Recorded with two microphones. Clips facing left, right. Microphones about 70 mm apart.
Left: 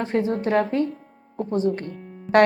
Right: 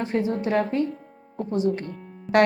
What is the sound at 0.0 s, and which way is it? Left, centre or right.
A woman's voice, left.